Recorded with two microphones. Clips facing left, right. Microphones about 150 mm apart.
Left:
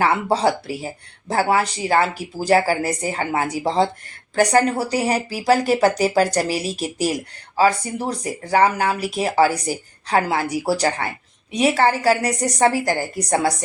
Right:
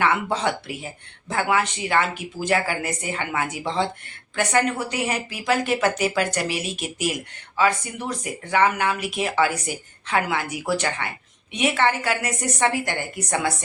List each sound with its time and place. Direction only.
0.0 s speech: 35° left (ahead or behind)